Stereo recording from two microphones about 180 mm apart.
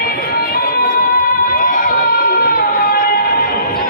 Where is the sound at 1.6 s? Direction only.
50° left (ahead or behind).